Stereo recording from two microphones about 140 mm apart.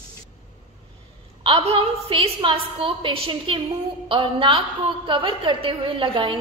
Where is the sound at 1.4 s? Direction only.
45° right (ahead or behind).